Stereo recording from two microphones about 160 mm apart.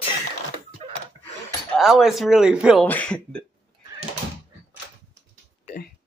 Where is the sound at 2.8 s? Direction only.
10° left (ahead or behind).